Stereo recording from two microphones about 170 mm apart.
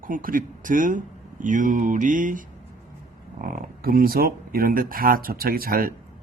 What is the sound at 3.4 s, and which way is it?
Speech, 60° right (ahead or behind).